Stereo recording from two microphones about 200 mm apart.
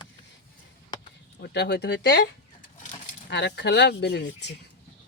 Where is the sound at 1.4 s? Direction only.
55° left (ahead or behind).